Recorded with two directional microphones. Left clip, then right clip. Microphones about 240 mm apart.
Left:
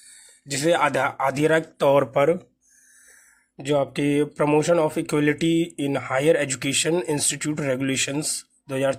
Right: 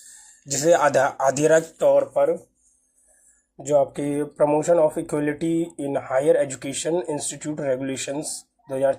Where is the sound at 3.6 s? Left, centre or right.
Left.